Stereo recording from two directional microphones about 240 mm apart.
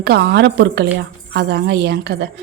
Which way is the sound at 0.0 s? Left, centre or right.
Right.